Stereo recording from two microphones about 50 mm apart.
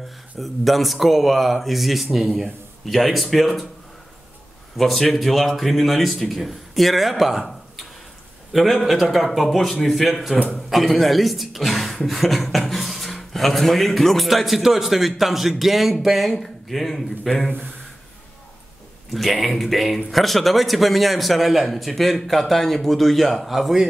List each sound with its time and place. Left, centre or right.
0.4 s speech: centre
4.7 s speech: centre
19.1 s speech: centre